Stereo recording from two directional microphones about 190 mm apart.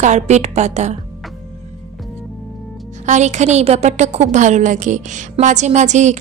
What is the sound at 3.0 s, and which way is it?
Speech, 40° right (ahead or behind).